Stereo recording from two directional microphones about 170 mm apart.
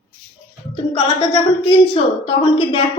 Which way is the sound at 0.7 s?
30° left (ahead or behind).